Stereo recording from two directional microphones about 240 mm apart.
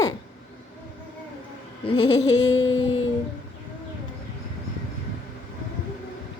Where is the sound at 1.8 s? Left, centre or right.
Centre.